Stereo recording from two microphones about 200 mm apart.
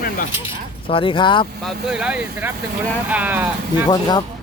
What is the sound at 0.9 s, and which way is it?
Speech, 25° left (ahead or behind).